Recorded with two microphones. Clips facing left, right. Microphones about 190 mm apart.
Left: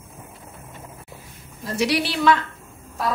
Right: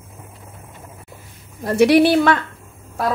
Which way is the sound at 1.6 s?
60° right (ahead or behind).